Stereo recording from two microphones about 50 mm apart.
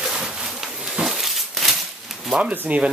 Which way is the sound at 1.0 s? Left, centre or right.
Centre.